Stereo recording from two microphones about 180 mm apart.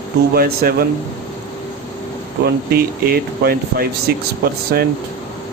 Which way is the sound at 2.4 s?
60° right (ahead or behind).